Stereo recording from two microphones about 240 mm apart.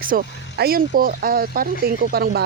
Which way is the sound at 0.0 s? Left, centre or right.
Right.